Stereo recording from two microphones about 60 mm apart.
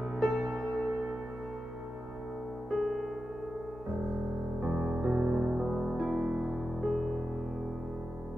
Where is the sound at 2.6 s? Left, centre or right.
Centre.